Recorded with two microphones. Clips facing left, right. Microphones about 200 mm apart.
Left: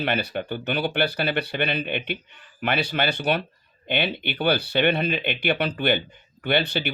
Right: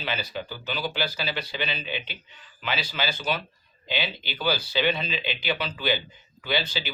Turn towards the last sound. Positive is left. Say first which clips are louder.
# left 5 dB
turn(degrees=60)  # may be behind; listen again after turning